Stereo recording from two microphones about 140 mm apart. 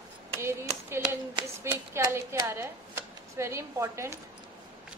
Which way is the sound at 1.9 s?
20° right (ahead or behind).